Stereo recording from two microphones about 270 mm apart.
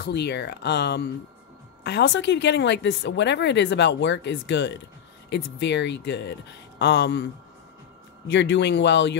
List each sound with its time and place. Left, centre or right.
0.0 s a woman's voice: left
8.3 s a woman's voice: left